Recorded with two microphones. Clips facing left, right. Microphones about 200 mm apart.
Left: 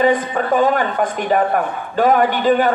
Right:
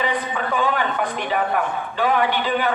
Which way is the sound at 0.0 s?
45° left (ahead or behind).